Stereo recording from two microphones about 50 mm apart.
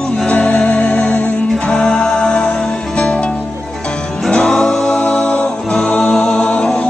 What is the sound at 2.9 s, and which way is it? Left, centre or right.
Music, left.